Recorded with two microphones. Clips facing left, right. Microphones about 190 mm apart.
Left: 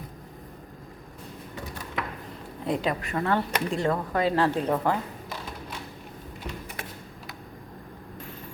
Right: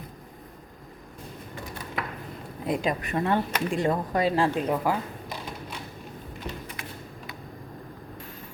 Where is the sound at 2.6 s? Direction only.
10° right (ahead or behind).